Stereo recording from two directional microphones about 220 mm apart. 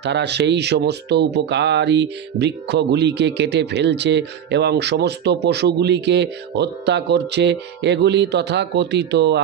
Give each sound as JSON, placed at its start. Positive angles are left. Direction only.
{"t": 0.0, "sound": "speech", "side_deg": -50}